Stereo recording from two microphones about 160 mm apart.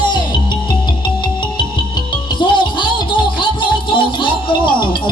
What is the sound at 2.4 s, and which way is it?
Music, 30° left (ahead or behind).